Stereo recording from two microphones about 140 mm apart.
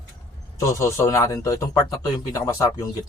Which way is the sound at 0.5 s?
20° left (ahead or behind).